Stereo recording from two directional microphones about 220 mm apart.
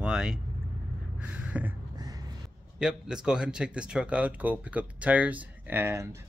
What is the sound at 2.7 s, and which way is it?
Speech, 5° right (ahead or behind).